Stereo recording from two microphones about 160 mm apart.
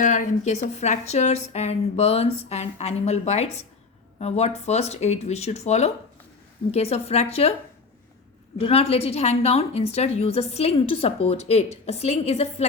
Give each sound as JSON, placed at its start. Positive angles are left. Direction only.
{"t": 0.0, "sound": "a woman's voice", "side_deg": 50}
{"t": 8.6, "sound": "a woman's voice", "side_deg": 40}